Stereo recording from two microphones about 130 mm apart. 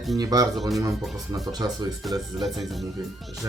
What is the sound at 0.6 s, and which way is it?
Speech, centre (ahead or behind).